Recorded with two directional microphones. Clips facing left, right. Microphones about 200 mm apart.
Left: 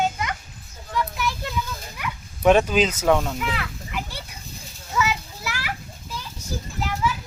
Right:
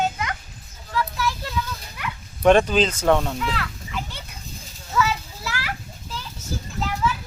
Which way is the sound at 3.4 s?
10° left (ahead or behind).